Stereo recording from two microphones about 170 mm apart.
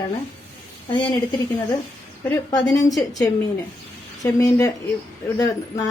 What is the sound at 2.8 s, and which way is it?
A woman's voice, 20° left (ahead or behind).